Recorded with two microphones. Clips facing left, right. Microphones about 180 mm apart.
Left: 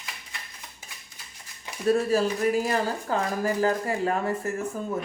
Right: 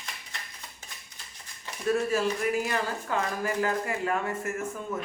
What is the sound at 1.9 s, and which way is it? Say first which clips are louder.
Speech: left 3 dB; 35° left (ahead or behind).